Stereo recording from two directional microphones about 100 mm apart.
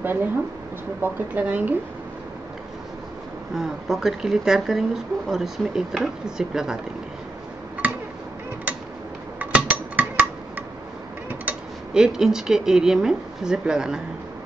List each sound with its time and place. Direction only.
0.0 s a woman's voice: 20° right (ahead or behind)
3.5 s speech: 5° right (ahead or behind)
9.4 s a sound: 15° right (ahead or behind)
11.2 s speech: 10° right (ahead or behind)